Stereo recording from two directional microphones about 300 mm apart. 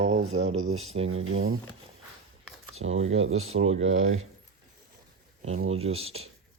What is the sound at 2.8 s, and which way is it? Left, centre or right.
Speech, right.